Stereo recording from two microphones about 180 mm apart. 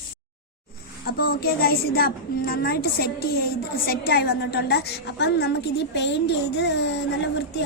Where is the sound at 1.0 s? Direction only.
55° left (ahead or behind).